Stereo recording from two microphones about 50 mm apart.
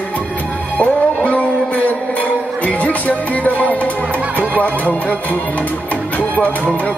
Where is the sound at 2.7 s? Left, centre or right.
Left.